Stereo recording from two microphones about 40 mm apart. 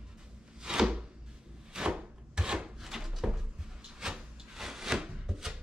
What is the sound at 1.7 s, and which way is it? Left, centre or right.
Wood, right.